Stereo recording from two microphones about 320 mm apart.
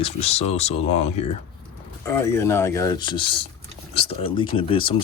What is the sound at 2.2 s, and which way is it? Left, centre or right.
Speech, centre.